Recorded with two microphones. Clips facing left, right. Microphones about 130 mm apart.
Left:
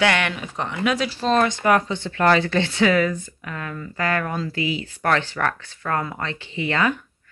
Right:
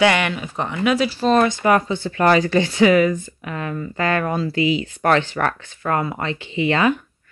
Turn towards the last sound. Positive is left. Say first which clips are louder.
# right 4 dB
turn(degrees=-20)  # may be behind; listen again after turning